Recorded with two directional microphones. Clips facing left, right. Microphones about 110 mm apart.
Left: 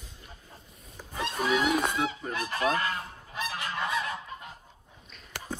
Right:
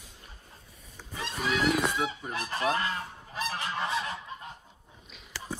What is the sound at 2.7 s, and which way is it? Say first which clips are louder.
Goose: left 1 dB; 30° right (ahead or behind).